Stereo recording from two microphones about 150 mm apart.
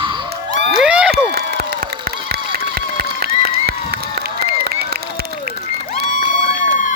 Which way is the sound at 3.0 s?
90° right.